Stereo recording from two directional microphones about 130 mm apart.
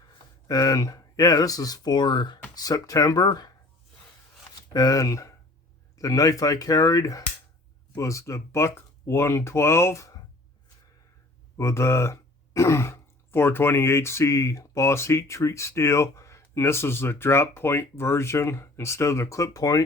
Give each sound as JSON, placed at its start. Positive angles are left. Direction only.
{"t": 0.4, "sound": "speech", "side_deg": 25}
{"t": 4.7, "sound": "speech", "side_deg": 30}
{"t": 11.5, "sound": "speech", "side_deg": 20}